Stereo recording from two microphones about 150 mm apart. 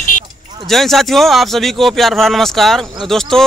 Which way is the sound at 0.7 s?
Centre (ahead or behind).